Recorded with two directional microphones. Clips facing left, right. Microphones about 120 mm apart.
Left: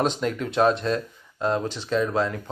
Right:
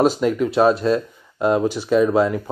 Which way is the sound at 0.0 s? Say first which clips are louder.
Right 7 dB; 5° right (ahead or behind).